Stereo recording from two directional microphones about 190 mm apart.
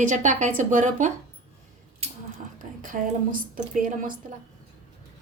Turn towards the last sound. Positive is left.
turn(degrees=-45)  # may be behind; listen again after turning